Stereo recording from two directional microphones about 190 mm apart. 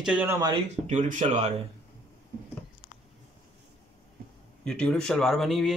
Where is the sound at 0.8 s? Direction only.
40° right (ahead or behind).